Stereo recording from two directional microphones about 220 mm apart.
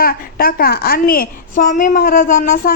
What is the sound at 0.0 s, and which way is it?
A woman's voice, 40° left (ahead or behind).